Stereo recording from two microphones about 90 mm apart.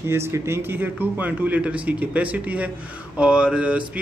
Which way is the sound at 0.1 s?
30° right (ahead or behind).